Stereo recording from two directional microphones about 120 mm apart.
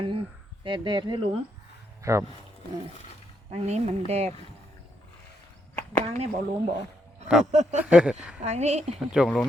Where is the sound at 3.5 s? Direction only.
65° right (ahead or behind).